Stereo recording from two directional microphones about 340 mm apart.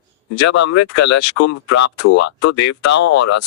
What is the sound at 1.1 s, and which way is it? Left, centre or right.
Speech, left.